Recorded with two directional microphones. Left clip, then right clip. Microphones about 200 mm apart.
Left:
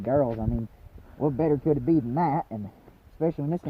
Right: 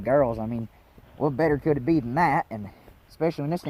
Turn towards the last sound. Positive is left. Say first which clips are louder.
# right 1 dB
turn(degrees=-20)  # may be behind; listen again after turning